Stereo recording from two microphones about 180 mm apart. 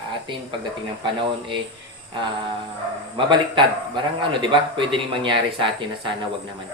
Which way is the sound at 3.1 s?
25° right (ahead or behind).